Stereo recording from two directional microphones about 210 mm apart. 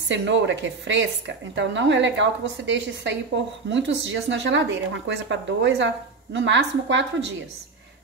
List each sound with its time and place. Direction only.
0.1 s a woman's voice: 60° right (ahead or behind)